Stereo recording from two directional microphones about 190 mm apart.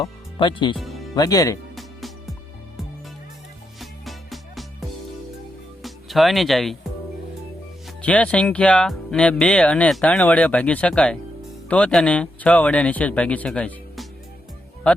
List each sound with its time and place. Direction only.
0.0 s speech: 25° left (ahead or behind)
1.7 s music: centre (ahead or behind)
3.8 s music: centre (ahead or behind)
5.8 s speech: centre (ahead or behind)
7.9 s speech: 5° left (ahead or behind)